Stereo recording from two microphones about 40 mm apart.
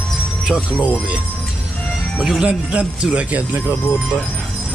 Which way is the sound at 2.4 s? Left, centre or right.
Right.